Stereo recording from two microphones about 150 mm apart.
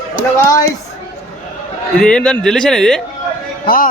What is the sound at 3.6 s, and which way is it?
Speech, 75° left (ahead or behind).